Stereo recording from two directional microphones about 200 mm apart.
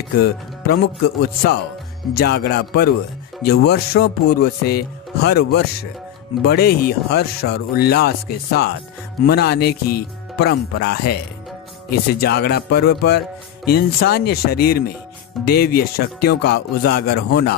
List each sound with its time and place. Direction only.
1.2 s music: 50° left (ahead or behind)